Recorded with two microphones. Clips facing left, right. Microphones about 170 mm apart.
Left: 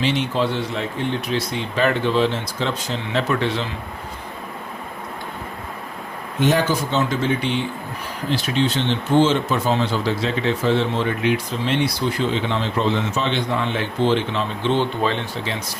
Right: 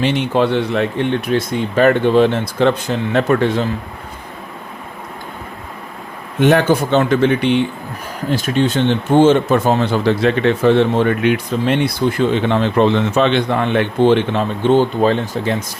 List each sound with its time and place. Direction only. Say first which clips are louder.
0.0 s speech: right 5 dB; 55° right (ahead or behind)
6.4 s speech: right 6 dB; 60° right (ahead or behind)
8.3 s speech: right 5 dB; 50° right (ahead or behind)